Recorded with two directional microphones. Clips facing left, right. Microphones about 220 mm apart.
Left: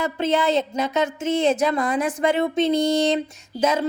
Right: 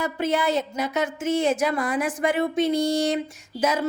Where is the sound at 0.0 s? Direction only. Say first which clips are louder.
Left 2 dB; 25° left (ahead or behind).